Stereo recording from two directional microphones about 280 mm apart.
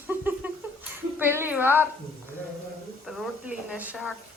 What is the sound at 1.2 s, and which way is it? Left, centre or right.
Speech, centre.